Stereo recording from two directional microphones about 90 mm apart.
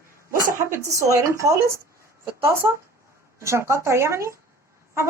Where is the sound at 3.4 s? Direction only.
30° right (ahead or behind).